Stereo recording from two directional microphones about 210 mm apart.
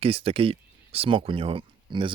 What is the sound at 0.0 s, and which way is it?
Speech, 25° right (ahead or behind).